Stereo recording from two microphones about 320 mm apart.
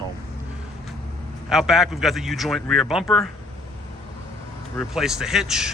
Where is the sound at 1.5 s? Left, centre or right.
Centre.